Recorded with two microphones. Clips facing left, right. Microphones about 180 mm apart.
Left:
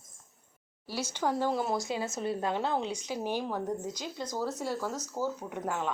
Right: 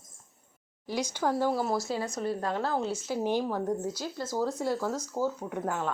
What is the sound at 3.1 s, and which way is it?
Speech, 10° left (ahead or behind).